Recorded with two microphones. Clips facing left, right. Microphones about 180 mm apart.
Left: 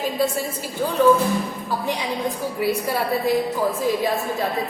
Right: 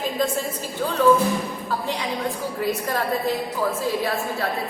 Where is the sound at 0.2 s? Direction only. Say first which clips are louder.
Left 2 dB; 10° left (ahead or behind).